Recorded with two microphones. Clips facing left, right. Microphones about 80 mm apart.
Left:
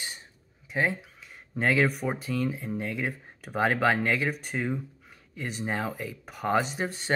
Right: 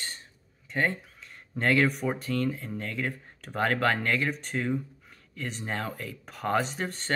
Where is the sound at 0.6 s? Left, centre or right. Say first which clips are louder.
Left 1 dB; centre.